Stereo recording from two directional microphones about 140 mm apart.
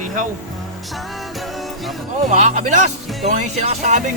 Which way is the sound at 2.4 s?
60° right (ahead or behind).